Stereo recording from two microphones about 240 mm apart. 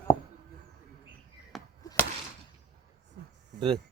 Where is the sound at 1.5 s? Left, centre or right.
Centre.